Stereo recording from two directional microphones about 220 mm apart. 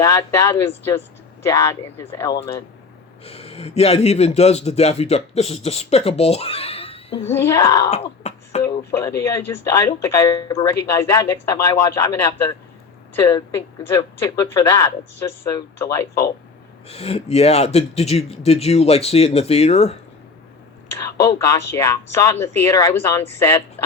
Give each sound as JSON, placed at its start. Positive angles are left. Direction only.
{"t": 0.0, "sound": "speech", "side_deg": 15}
{"t": 3.2, "sound": "a man's voice", "side_deg": 30}
{"t": 7.3, "sound": "speech", "side_deg": 10}
{"t": 7.9, "sound": "speech", "side_deg": 30}
{"t": 8.6, "sound": "speech", "side_deg": 15}
{"t": 16.9, "sound": "a man's voice", "side_deg": 25}
{"t": 20.9, "sound": "speech", "side_deg": 15}